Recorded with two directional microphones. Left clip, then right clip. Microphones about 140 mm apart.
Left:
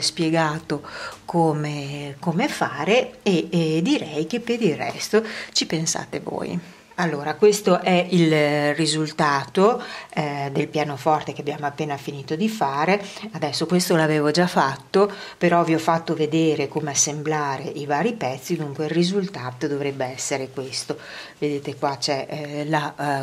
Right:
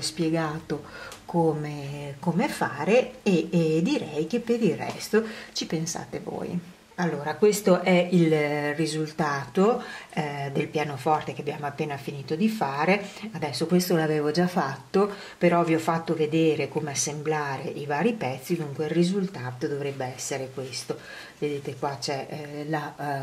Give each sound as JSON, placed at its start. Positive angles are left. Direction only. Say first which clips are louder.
{"t": 0.0, "sound": "speech", "louder": "left 6 dB", "side_deg": 25}